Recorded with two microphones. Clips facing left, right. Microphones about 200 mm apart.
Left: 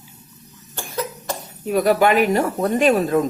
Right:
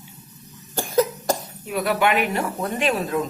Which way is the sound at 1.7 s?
40° left (ahead or behind).